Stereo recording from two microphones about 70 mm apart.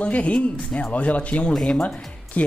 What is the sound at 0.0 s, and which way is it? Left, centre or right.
Speech, centre.